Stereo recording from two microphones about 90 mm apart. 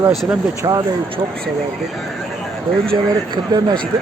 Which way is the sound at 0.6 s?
50° right (ahead or behind).